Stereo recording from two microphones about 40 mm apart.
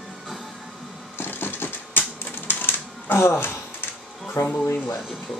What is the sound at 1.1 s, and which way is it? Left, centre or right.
Typewriter, left.